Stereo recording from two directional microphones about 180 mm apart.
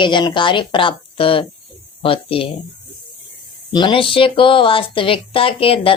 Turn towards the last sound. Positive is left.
turn(degrees=30)  # may be behind; listen again after turning